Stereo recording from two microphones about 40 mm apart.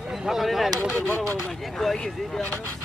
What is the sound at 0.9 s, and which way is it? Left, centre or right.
Speech, left.